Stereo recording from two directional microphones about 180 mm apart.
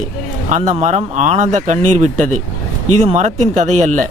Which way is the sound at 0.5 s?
40° right (ahead or behind).